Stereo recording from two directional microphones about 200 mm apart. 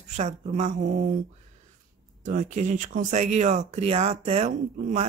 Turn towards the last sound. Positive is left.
turn(degrees=-35)  # may be behind; listen again after turning